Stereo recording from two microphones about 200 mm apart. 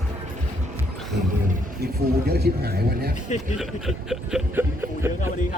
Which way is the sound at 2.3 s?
50° right (ahead or behind).